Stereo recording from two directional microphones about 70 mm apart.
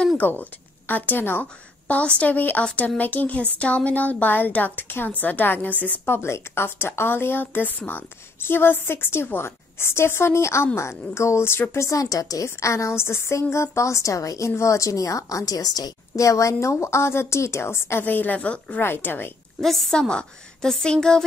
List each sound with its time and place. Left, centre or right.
0.2 s a woman's voice: left
12.4 s a woman's voice: left
16.3 s a woman's voice: left
18.0 s a woman's voice: left
18.8 s a woman's voice: left
19.6 s a woman's voice: centre